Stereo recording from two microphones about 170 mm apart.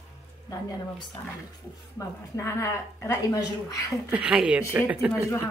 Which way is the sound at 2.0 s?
15° left (ahead or behind).